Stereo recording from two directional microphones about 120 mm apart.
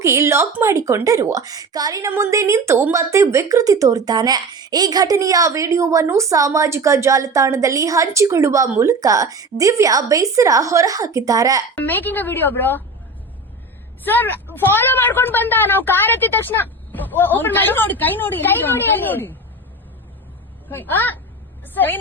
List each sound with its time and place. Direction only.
0.0 s a woman's voice: 25° right (ahead or behind)
11.8 s a woman's voice: 15° left (ahead or behind)
14.0 s a woman's voice: 15° left (ahead or behind)
20.7 s a woman's voice: 15° left (ahead or behind)